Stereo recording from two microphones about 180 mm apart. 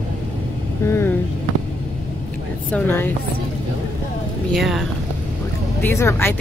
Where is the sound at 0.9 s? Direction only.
15° left (ahead or behind).